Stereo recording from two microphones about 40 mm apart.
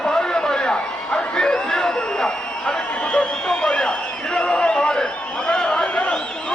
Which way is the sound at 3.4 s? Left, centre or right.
Centre.